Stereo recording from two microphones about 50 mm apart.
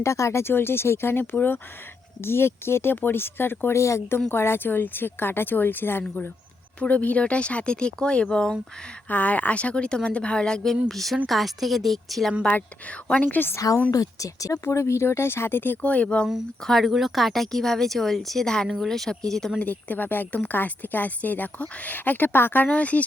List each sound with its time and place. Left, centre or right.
0.0 s speech: left
2.2 s speech: left
3.8 s speech: left
4.3 s speech: left
6.7 s speech: left
9.0 s speech: left; by 12.3 s centre
13.1 s a woman's voice: left
14.2 s speech: left
15.8 s speech: left
16.8 s speech: centre
19.5 s a woman's voice: left